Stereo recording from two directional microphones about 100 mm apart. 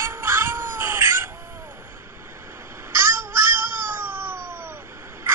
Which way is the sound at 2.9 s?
25° right (ahead or behind).